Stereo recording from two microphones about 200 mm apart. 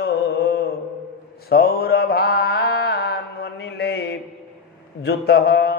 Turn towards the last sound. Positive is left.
turn(degrees=50)  # may be behind; listen again after turning